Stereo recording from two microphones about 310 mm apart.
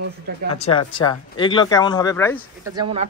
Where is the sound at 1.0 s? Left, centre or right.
Centre.